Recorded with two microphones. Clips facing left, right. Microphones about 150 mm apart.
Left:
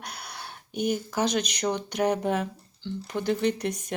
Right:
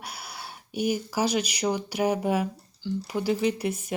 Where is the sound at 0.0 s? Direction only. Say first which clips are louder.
Even; 5° right (ahead or behind).